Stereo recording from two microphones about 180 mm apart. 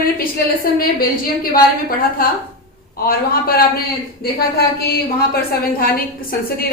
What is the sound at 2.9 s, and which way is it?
A man's voice, 55° left (ahead or behind).